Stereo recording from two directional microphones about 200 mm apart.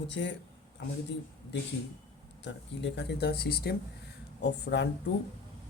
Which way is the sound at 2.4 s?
60° left (ahead or behind).